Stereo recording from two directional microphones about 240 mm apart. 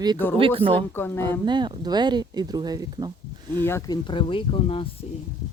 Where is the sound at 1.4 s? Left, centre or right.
Centre.